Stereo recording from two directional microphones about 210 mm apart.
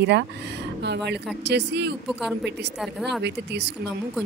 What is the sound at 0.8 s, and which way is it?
Speech, 55° right (ahead or behind).